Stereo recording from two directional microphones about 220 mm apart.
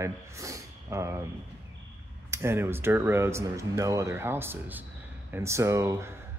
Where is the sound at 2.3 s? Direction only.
10° right (ahead or behind).